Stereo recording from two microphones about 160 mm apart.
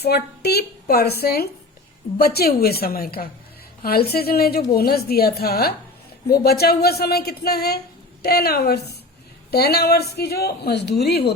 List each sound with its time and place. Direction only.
0.0 s a woman's voice: 85° left